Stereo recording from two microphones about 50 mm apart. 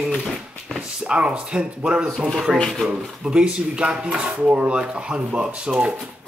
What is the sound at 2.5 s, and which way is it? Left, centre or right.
Speech, centre.